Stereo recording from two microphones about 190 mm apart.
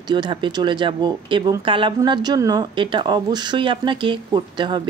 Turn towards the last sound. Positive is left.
turn(degrees=-25)  # may be behind; listen again after turning